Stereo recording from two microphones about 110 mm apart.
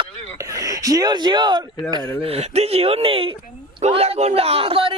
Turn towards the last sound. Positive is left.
turn(degrees=-55)  # may be behind; listen again after turning